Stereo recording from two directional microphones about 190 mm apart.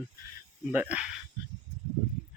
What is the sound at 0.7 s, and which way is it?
Speech, 5° right (ahead or behind).